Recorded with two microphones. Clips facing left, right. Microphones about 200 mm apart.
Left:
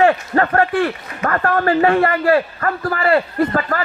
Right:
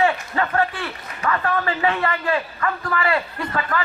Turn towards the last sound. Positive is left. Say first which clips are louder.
# left 7 dB
turn(degrees=45)  # may be behind; listen again after turning